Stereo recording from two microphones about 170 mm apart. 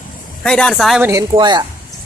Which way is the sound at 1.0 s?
15° right (ahead or behind).